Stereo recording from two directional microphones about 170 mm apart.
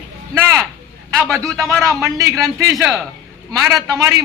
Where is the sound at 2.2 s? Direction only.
20° right (ahead or behind).